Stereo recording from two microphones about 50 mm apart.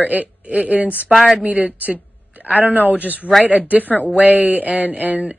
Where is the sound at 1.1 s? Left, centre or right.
Centre.